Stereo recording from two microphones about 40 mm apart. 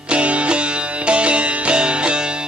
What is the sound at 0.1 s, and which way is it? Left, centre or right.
Music, right.